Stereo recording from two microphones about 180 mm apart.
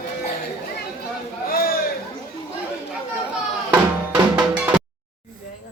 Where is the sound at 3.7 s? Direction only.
5° right (ahead or behind).